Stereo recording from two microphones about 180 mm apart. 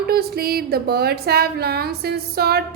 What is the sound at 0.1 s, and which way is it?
A woman's voice, 60° right (ahead or behind).